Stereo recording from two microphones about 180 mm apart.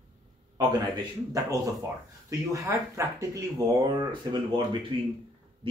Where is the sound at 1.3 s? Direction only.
20° right (ahead or behind).